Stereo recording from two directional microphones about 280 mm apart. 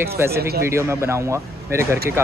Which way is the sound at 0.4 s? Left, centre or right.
Right.